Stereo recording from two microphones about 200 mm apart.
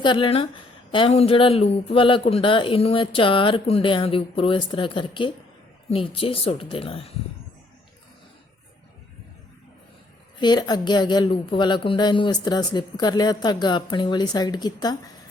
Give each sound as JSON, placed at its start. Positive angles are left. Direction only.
{"t": 0.0, "sound": "speech", "side_deg": 25}
{"t": 10.4, "sound": "speech", "side_deg": 20}